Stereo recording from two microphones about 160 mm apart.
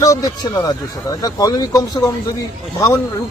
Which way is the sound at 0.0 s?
20° left (ahead or behind).